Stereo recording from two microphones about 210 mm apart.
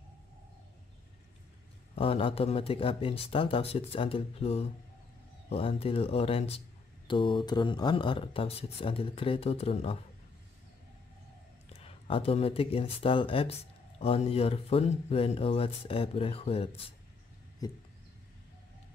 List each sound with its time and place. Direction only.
2.0 s speech: 25° left (ahead or behind)
11.8 s speech: 25° left (ahead or behind)
17.6 s a sound: 20° left (ahead or behind)